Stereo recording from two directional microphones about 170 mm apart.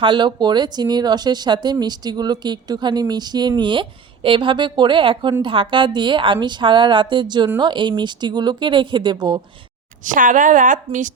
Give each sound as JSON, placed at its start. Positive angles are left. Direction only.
{"t": 0.0, "sound": "speech", "side_deg": -30}
{"t": 10.0, "sound": "speech", "side_deg": -50}